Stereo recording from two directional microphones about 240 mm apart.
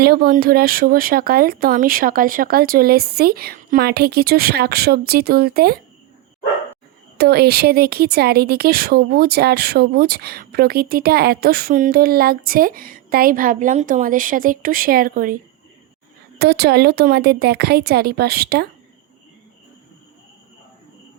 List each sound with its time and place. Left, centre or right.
0.0 s speech: right
7.2 s speech: right
16.4 s speech: right